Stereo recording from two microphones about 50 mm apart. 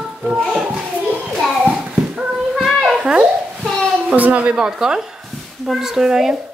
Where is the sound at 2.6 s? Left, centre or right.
Centre.